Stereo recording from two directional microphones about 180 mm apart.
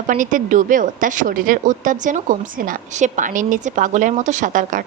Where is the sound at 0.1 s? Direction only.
45° right (ahead or behind).